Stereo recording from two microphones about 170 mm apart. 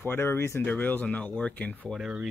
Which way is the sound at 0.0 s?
15° left (ahead or behind).